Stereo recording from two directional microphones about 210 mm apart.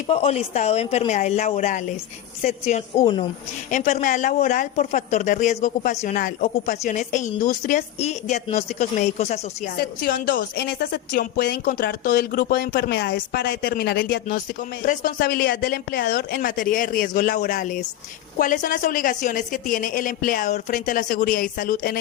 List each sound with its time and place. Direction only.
0.1 s speech: 30° left (ahead or behind)
9.7 s a woman's voice: 45° left (ahead or behind)